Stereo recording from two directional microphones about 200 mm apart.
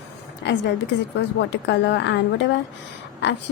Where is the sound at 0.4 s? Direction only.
60° left (ahead or behind).